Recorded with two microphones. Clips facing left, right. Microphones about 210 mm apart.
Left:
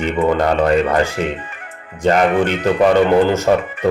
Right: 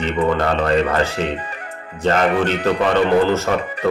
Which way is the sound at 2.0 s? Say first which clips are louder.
Left 3 dB; 15° left (ahead or behind).